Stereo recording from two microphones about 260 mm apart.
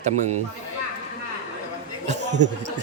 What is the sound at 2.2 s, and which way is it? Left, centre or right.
Speech, right.